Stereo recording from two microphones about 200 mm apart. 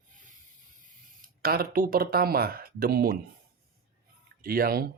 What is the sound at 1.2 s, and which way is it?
Speech, 50° right (ahead or behind).